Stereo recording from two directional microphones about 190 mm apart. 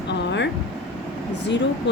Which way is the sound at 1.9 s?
65° left (ahead or behind).